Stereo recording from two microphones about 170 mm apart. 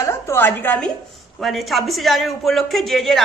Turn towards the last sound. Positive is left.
turn(degrees=0)  # may be behind; listen again after turning